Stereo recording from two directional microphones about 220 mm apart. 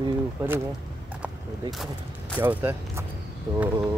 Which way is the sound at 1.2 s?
Centre (ahead or behind).